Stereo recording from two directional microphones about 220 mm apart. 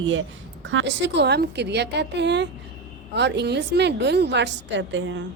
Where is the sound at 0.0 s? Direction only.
60° right (ahead or behind).